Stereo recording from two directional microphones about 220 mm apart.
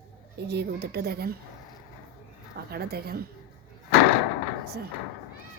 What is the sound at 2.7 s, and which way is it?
Speech, 45° right (ahead or behind).